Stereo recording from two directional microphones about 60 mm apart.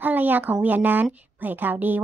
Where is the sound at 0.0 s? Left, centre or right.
Right.